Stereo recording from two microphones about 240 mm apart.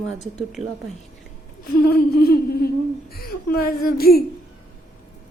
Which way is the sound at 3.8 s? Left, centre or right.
Left.